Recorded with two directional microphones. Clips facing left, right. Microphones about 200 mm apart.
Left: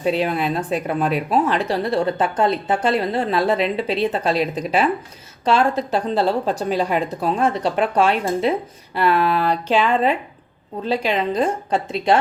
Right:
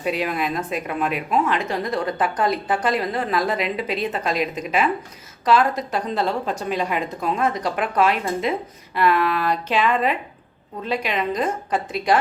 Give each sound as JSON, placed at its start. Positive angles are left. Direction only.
{"t": 0.0, "sound": "a woman's voice", "side_deg": 30}